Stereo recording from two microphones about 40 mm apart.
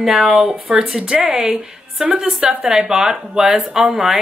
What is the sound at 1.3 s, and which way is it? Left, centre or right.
A woman's voice, centre.